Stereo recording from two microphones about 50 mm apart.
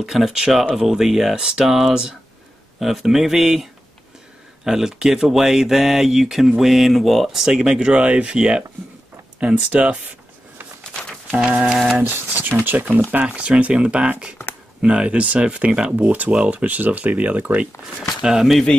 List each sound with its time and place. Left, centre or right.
0.0 s speech: centre
4.6 s speech: centre; by 10.1 s right
11.3 s speech: right
11.7 s speech: centre
12.0 s speech: right
13.2 s speech: right
16.0 s speech: right
17.9 s speech: centre